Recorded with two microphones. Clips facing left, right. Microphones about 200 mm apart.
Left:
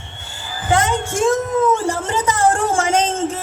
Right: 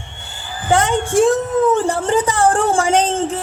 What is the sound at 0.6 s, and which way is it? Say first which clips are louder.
A woman's voice: right 2 dB; 35° right (ahead or behind).